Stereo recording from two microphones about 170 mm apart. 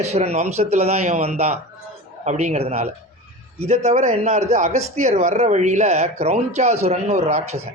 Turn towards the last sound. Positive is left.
turn(degrees=-40)  # may be behind; listen again after turning